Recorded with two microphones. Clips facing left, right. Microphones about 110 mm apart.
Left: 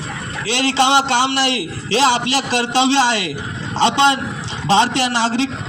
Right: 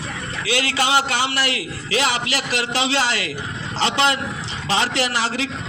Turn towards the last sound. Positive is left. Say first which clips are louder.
# left 5 dB
turn(degrees=25)  # may be behind; listen again after turning